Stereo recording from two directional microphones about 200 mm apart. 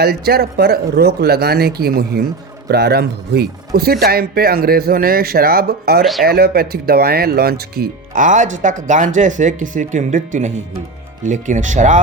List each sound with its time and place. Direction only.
0.0 s speech: 50° right (ahead or behind)
6.0 s speech: centre (ahead or behind)
6.2 s speech: 50° right (ahead or behind)